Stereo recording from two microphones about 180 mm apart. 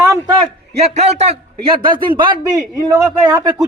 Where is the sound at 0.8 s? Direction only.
40° right (ahead or behind).